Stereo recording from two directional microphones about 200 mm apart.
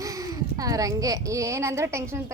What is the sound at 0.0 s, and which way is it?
Speech, 15° right (ahead or behind).